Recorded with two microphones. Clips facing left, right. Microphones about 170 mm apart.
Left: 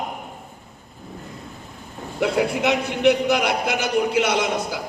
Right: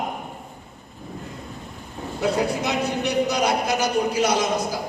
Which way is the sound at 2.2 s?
70° left (ahead or behind).